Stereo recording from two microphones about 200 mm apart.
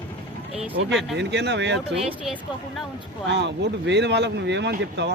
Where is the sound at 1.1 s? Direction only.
60° right (ahead or behind).